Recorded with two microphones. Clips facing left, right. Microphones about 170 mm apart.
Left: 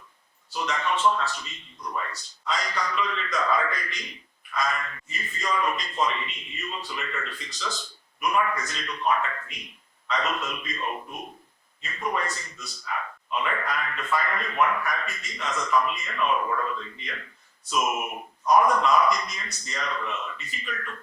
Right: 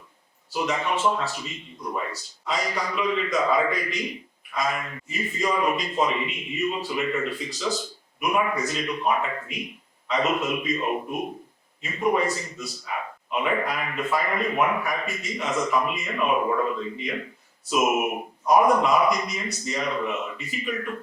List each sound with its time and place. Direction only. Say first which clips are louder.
0.5 s a man's voice: right 2 dB; 10° right (ahead or behind)
12.3 s a man's voice: right 8 dB; 5° right (ahead or behind)
15.0 s a man's voice: right 6 dB; 5° right (ahead or behind)
15.4 s a man's voice: right 5 dB; 20° right (ahead or behind)
15.7 s a man's voice: even; 10° right (ahead or behind)